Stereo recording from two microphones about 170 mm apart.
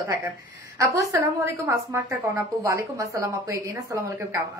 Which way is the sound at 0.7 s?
20° right (ahead or behind).